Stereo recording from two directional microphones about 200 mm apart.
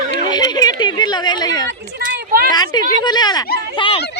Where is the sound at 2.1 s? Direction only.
50° right (ahead or behind).